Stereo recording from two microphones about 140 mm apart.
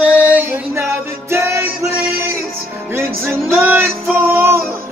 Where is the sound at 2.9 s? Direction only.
15° right (ahead or behind).